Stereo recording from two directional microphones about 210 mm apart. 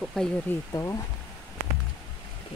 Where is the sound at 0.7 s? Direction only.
15° left (ahead or behind).